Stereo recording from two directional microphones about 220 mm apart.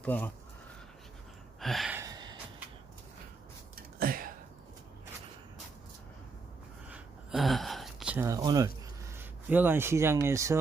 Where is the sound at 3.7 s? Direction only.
40° right (ahead or behind).